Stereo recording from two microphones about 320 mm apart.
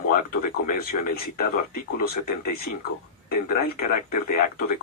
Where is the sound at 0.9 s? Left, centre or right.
Left.